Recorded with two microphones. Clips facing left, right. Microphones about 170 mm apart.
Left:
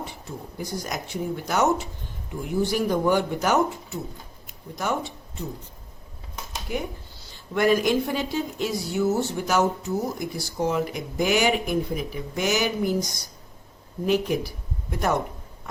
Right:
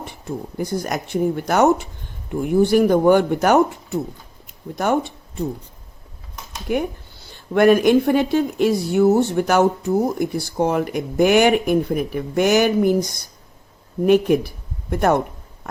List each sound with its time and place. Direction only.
0.0 s speech: 55° right (ahead or behind)
6.7 s speech: 60° right (ahead or behind)